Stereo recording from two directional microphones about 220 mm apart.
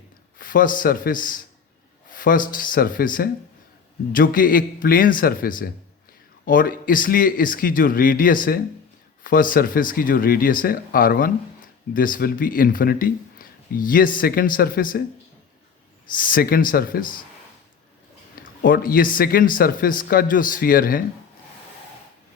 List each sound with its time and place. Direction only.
0.3 s a man's voice: 40° left (ahead or behind)
16.1 s speech: 40° left (ahead or behind)
18.6 s speech: 40° left (ahead or behind)